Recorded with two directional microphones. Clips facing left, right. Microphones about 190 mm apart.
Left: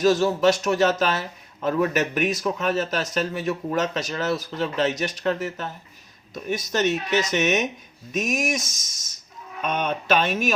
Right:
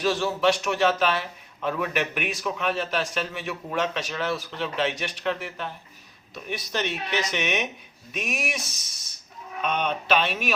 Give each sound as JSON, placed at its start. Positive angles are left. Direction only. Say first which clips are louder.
{"t": 0.0, "sound": "speech", "louder": "left 5 dB", "side_deg": 40}